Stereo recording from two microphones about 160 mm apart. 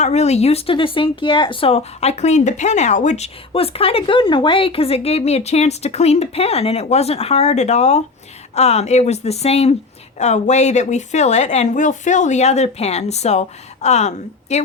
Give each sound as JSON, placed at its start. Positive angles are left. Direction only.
{"t": 0.0, "sound": "a woman's voice", "side_deg": 45}